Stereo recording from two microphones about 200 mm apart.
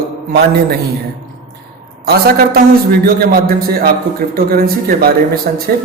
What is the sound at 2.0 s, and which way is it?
A man's voice, 50° right (ahead or behind).